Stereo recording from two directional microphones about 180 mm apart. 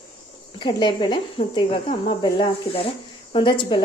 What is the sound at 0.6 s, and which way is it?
A woman's voice, 25° left (ahead or behind).